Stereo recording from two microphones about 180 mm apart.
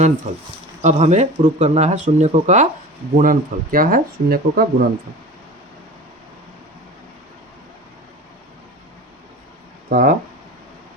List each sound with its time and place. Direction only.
0.8 s speech: 40° right (ahead or behind); by 4.9 s 55° right (ahead or behind)
9.9 s speech: 45° right (ahead or behind)